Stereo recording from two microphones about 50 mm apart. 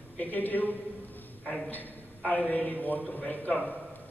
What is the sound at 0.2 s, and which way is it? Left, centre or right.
A man's voice, left.